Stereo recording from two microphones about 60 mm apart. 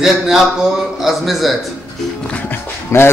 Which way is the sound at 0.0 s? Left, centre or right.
Centre.